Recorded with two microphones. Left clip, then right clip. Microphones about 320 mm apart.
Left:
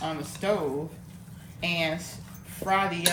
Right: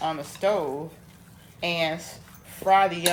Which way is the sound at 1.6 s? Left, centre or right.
Centre.